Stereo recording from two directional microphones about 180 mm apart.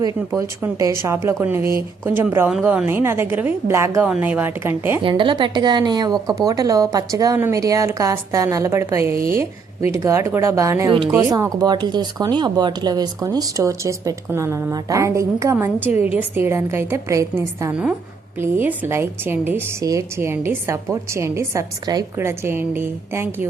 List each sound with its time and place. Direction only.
0.3 s a woman's voice: 15° right (ahead or behind)
5.0 s speech: 30° right (ahead or behind)
9.4 s a woman's voice: 35° left (ahead or behind)
10.0 s a woman's voice: 15° right (ahead or behind)